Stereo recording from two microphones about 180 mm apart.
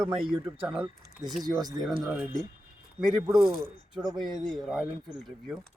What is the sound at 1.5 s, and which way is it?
Speech, 20° right (ahead or behind).